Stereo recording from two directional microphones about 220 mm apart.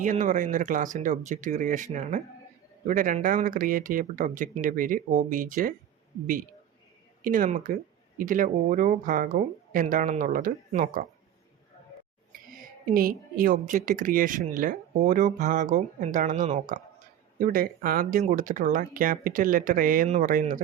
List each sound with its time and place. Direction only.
0.0 s speech: 35° right (ahead or behind)
7.3 s speech: 35° right (ahead or behind)
12.9 s speech: 40° right (ahead or behind)